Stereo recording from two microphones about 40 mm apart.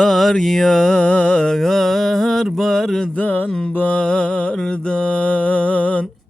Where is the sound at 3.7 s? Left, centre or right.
Left.